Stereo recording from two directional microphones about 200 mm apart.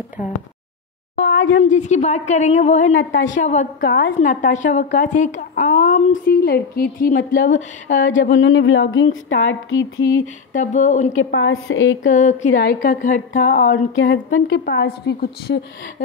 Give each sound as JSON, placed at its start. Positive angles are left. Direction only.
{"t": 1.3, "sound": "a sound", "side_deg": 70}
{"t": 1.6, "sound": "a woman's voice", "side_deg": 35}
{"t": 3.0, "sound": "a sound", "side_deg": 70}
{"t": 3.3, "sound": "a woman's voice", "side_deg": 35}
{"t": 3.8, "sound": "a woman's voice", "side_deg": 60}
{"t": 4.2, "sound": "a woman's voice", "side_deg": 40}
{"t": 6.4, "sound": "a woman's voice", "side_deg": 50}
{"t": 8.0, "sound": "a sound", "side_deg": 70}
{"t": 10.5, "sound": "a woman's voice", "side_deg": 35}
{"t": 11.3, "sound": "a woman's voice", "side_deg": 80}
{"t": 12.1, "sound": "a woman's voice", "side_deg": 35}
{"t": 13.5, "sound": "a sound", "side_deg": 65}
{"t": 14.6, "sound": "a woman's voice", "side_deg": 55}